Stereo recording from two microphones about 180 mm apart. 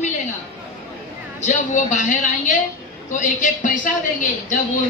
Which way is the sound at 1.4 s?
45° left (ahead or behind).